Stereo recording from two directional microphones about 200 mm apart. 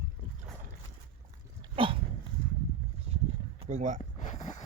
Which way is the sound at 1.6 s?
25° right (ahead or behind).